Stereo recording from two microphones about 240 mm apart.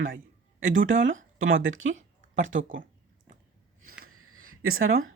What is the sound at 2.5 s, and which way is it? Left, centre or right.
Speech, right.